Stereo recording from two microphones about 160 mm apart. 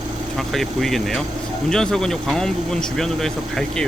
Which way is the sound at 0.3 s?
Centre (ahead or behind).